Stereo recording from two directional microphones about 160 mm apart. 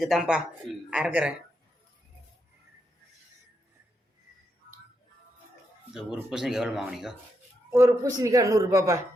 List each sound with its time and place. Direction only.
0.0 s speech: centre (ahead or behind)
5.9 s speech: 5° right (ahead or behind)
7.7 s a man's voice: 20° right (ahead or behind)